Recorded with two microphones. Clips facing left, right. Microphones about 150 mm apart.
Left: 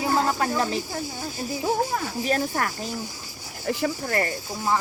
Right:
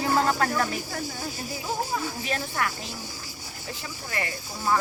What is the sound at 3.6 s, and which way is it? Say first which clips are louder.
Speech: left 13 dB; 65° left (ahead or behind).